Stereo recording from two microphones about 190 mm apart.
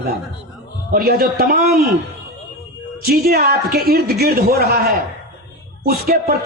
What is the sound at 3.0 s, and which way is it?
A man's voice, 55° right (ahead or behind).